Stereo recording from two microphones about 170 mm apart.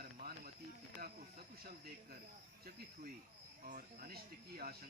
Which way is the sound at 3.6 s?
55° right (ahead or behind).